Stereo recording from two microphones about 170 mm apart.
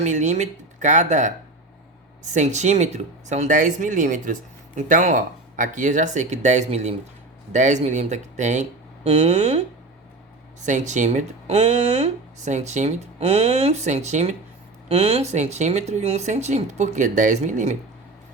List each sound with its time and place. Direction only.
0.0 s speech: 45° right (ahead or behind)
10.7 s speech: 45° right (ahead or behind)